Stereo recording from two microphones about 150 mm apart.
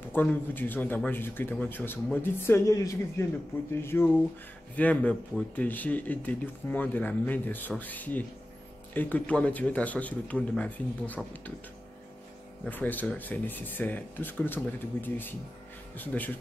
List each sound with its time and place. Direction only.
0.1 s speech: 10° left (ahead or behind)
12.6 s speech: 10° left (ahead or behind)